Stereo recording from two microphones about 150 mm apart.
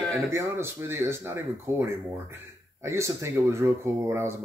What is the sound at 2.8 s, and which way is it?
Speech, 20° right (ahead or behind).